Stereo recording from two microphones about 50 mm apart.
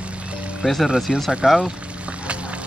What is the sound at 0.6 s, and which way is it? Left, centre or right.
Speech, centre.